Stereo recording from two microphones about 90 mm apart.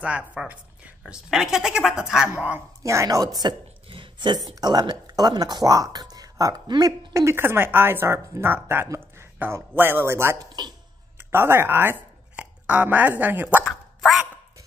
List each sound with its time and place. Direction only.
0.0 s a woman's voice: 15° right (ahead or behind)
2.8 s a woman's voice: 35° right (ahead or behind)
3.9 s a sound: 65° right (ahead or behind)
4.6 s speech: 50° right (ahead or behind)
7.3 s speech: 25° right (ahead or behind)
8.8 s a sound: 30° right (ahead or behind)
9.4 s speech: 25° right (ahead or behind)
10.4 s speech: 50° right (ahead or behind)
11.1 s speech: 25° right (ahead or behind)
12.4 s a sound: 15° right (ahead or behind)
13.2 s speech: 20° right (ahead or behind)
13.7 s dog: centre (ahead or behind)